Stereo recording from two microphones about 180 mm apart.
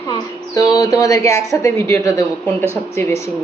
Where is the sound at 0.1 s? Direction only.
20° left (ahead or behind).